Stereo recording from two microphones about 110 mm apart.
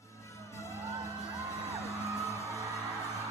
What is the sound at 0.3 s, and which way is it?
Music, 25° left (ahead or behind).